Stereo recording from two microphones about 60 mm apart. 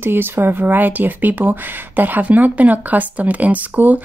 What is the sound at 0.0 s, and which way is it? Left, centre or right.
Speech, right.